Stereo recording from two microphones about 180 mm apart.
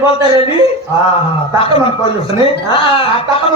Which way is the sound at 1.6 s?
30° left (ahead or behind).